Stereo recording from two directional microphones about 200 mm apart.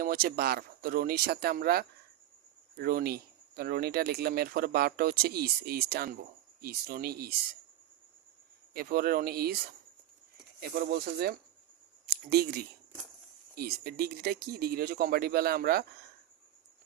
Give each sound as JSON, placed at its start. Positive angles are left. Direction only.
{"t": 0.0, "sound": "speech", "side_deg": -50}
{"t": 8.7, "sound": "speech", "side_deg": -50}
{"t": 10.6, "sound": "speech", "side_deg": -50}
{"t": 12.0, "sound": "a sound", "side_deg": -50}
{"t": 13.6, "sound": "speech", "side_deg": -50}